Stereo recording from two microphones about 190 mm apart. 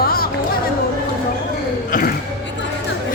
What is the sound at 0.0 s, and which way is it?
Music, 50° left (ahead or behind).